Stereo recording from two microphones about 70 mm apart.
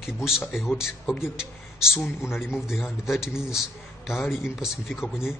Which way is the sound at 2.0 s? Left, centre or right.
Left.